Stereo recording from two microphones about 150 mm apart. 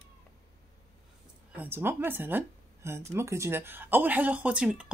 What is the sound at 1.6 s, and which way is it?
Speech, 15° right (ahead or behind).